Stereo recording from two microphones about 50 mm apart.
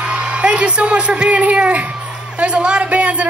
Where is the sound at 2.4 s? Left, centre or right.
Right.